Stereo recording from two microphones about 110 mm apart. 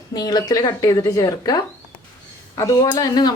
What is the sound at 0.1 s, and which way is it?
Speech, 35° left (ahead or behind).